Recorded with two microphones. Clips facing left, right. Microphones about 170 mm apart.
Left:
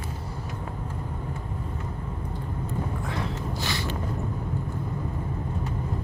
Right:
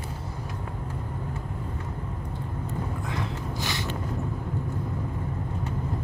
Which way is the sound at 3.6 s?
15° right (ahead or behind).